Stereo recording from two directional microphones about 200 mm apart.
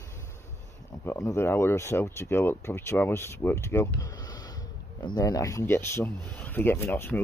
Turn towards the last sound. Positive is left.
turn(degrees=10)  # may be behind; listen again after turning